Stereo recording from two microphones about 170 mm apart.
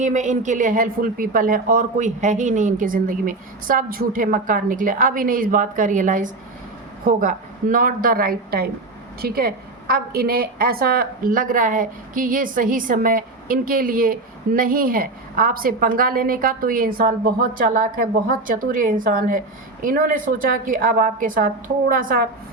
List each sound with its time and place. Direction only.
0.0 s a woman's voice: 45° right (ahead or behind)